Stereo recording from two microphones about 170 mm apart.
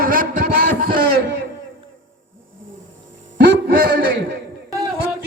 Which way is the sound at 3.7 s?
75° right (ahead or behind).